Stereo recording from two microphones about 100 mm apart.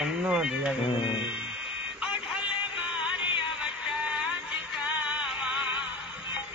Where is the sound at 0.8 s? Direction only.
55° left (ahead or behind).